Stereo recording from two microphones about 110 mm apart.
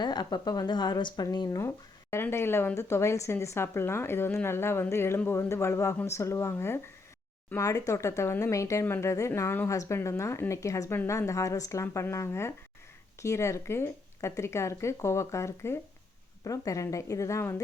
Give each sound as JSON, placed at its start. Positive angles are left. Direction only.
{"t": 0.0, "sound": "speech", "side_deg": 40}
{"t": 1.5, "sound": "speech", "side_deg": 25}